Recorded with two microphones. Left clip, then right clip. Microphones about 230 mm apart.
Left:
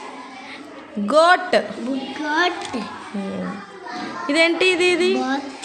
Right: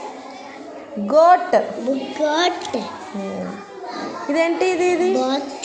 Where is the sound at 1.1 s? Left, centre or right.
Left.